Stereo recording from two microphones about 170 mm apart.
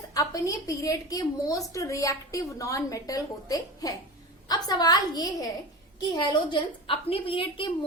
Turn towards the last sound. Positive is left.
turn(degrees=30)  # may be behind; listen again after turning